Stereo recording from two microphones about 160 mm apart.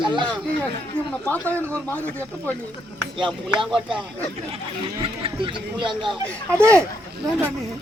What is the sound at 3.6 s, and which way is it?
Speech, centre (ahead or behind).